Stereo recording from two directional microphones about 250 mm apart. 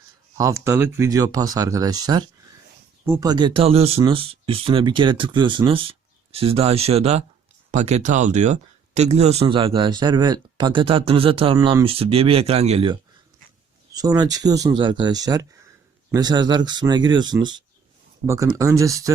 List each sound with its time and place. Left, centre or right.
0.3 s speech: centre